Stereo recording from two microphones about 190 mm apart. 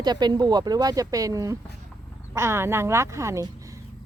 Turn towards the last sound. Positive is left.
turn(degrees=-15)  # may be behind; listen again after turning